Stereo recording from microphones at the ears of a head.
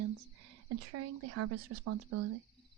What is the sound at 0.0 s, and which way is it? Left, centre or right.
Speech, right.